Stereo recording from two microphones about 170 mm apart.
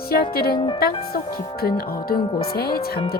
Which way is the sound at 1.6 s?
60° left (ahead or behind).